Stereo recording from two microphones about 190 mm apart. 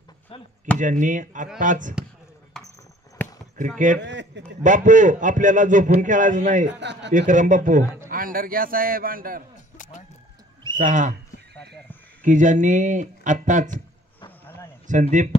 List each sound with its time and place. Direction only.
0.3 s chop: 25° left (ahead or behind)
0.7 s a man's voice: 40° right (ahead or behind)
3.2 s a sound: 10° left (ahead or behind)
3.7 s a man's voice: 40° right (ahead or behind)
4.0 s a man's voice: 65° right (ahead or behind)
4.6 s a man's voice: 40° right (ahead or behind)
6.7 s a man's voice: 65° right (ahead or behind)
7.1 s a man's voice: 40° right (ahead or behind)
10.8 s a man's voice: 40° right (ahead or behind)
12.2 s a man's voice: 40° right (ahead or behind)
14.4 s a sound: 10° left (ahead or behind)
14.9 s a man's voice: 40° right (ahead or behind)